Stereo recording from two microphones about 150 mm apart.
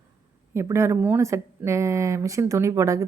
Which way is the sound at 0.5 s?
20° right (ahead or behind).